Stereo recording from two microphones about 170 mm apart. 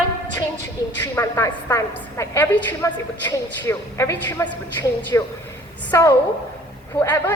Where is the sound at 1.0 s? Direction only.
15° left (ahead or behind).